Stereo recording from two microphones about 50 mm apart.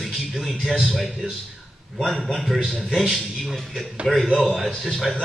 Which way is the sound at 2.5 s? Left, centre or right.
Centre.